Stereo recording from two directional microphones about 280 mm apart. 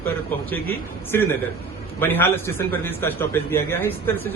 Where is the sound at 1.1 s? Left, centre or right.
Centre.